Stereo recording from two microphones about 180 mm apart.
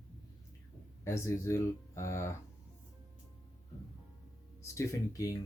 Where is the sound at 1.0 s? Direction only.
15° left (ahead or behind).